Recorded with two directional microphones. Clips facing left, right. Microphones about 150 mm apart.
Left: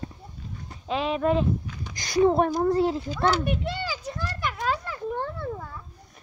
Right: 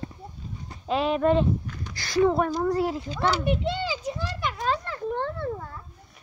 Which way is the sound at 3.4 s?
20° right (ahead or behind).